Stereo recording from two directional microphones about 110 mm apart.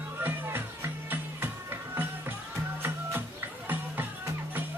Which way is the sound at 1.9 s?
20° right (ahead or behind).